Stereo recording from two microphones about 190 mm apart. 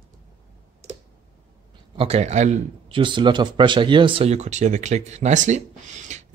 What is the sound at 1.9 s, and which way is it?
Speech, 35° right (ahead or behind).